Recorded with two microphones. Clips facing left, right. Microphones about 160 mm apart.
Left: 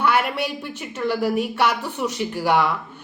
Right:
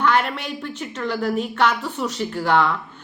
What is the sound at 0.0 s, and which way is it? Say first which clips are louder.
A woman's voice: even; 10° left (ahead or behind).